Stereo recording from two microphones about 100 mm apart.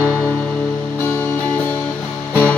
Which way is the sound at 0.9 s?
20° left (ahead or behind).